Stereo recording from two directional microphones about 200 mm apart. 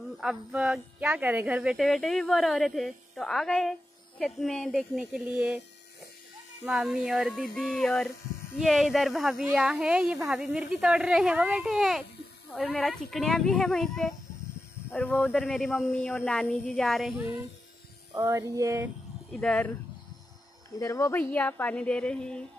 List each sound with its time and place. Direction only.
0.2 s speech: 5° right (ahead or behind)
6.6 s speech: 5° right (ahead or behind)
18.1 s a sound: 15° right (ahead or behind)
19.4 s a woman's voice: 5° left (ahead or behind)
20.8 s a woman's voice: 15° left (ahead or behind)